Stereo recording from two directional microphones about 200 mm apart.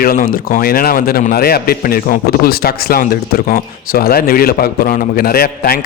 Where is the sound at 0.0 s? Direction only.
45° left (ahead or behind).